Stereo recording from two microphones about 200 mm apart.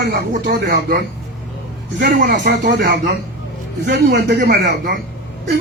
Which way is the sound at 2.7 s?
55° right (ahead or behind).